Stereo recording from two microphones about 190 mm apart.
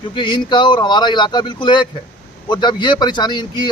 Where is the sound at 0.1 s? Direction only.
25° left (ahead or behind).